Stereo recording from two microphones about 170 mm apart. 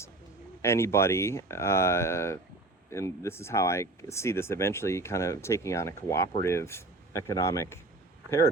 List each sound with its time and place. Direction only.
0.6 s speech: 15° left (ahead or behind)